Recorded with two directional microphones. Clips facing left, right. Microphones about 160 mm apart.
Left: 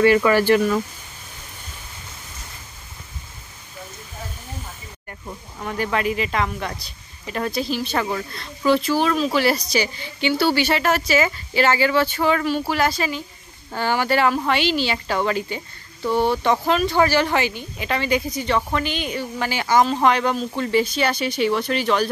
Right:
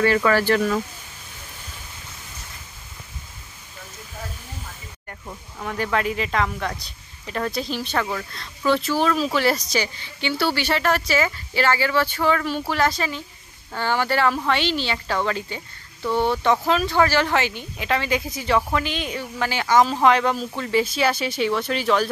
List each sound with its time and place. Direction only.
0.0 s speech: 15° left (ahead or behind)
5.6 s speech: 5° left (ahead or behind)
8.6 s speech: 5° left (ahead or behind)
9.7 s speech: 15° left (ahead or behind)
12.4 s speech: 5° left (ahead or behind)
16.1 s speech: 5° left (ahead or behind)